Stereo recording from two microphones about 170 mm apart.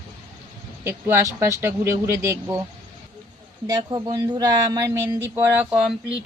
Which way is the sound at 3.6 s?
25° right (ahead or behind).